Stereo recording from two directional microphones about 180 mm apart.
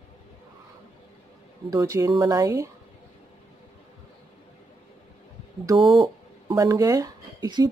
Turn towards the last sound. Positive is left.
turn(degrees=-20)  # may be behind; listen again after turning